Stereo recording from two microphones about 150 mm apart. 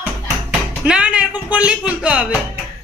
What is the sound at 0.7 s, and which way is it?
Speech, 5° right (ahead or behind).